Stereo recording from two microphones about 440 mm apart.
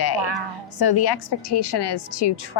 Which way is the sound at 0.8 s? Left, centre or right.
Left.